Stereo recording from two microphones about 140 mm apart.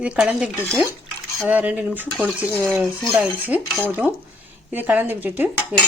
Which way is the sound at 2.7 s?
Centre (ahead or behind).